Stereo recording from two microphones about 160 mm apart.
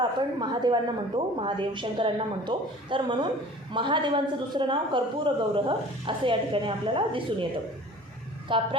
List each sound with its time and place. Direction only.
0.0 s a woman's voice: 30° right (ahead or behind)
8.5 s speech: 30° right (ahead or behind)